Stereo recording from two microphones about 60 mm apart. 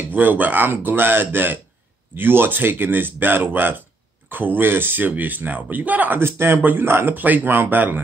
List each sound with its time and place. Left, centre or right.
0.1 s speech: right
6.1 s speech: right